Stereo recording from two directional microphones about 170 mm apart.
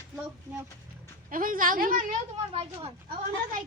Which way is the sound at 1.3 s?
55° right (ahead or behind).